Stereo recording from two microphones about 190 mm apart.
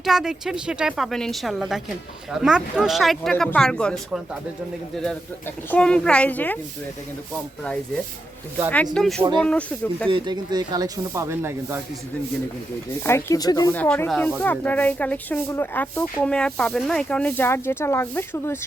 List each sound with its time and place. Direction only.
0.0 s speech: centre (ahead or behind)
5.7 s speech: 5° left (ahead or behind)
9.0 s speech: 5° left (ahead or behind)
10.1 s speech: 25° right (ahead or behind)
13.1 s speech: 15° left (ahead or behind)
13.7 s speech: 10° left (ahead or behind)